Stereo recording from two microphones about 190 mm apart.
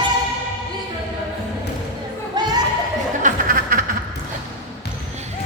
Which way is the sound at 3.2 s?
45° right (ahead or behind).